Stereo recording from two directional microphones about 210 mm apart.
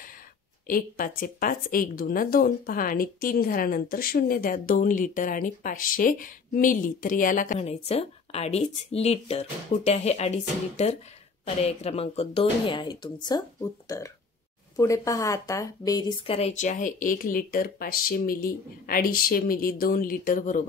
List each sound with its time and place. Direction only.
0.7 s a woman's voice: 40° left (ahead or behind)